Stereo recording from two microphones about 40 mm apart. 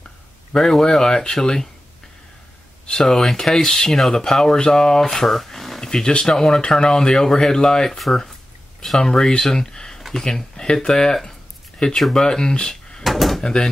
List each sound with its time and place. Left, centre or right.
0.6 s speech: centre
3.1 s speech: centre
5.9 s speech: centre
9.0 s speech: centre
9.9 s a sound: centre
10.2 s speech: centre
13.0 s drawer open or close: centre
13.4 s speech: centre